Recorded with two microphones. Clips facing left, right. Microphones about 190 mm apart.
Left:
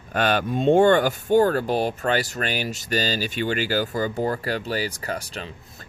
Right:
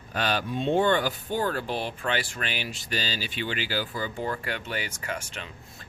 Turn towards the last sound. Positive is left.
turn(degrees=35)  # may be behind; listen again after turning